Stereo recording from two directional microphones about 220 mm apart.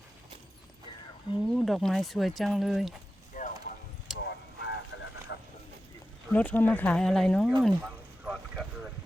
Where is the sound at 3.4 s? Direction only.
35° left (ahead or behind).